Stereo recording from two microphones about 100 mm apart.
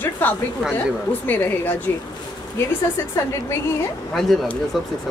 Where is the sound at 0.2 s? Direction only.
20° left (ahead or behind).